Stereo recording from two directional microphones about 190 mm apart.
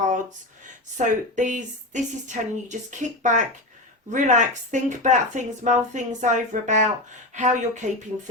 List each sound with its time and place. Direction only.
0.9 s speech: 40° right (ahead or behind)